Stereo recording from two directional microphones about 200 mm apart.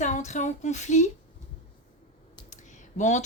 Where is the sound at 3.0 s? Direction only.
35° left (ahead or behind).